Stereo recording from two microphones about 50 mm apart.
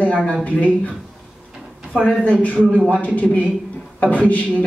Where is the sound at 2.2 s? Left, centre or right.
Left.